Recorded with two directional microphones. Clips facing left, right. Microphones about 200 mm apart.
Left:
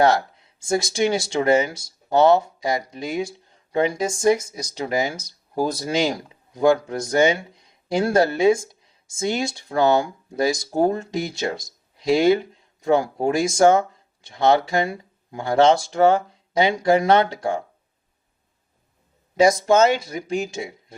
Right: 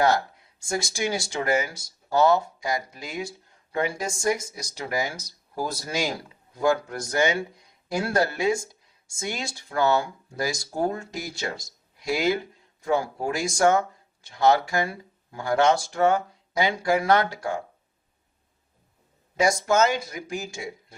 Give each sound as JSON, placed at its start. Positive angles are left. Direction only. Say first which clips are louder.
{"t": 0.7, "sound": "speech", "louder": "left 7 dB", "side_deg": 25}
{"t": 19.4, "sound": "speech", "louder": "left 5 dB", "side_deg": 25}